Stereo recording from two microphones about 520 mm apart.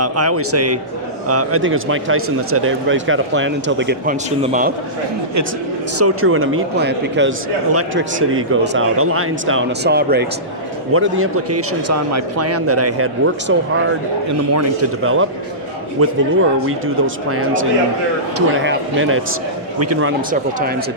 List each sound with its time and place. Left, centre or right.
0.0 s speech: right
6.0 s speech: right